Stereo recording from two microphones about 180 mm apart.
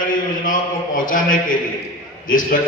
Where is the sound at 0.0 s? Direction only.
50° left (ahead or behind).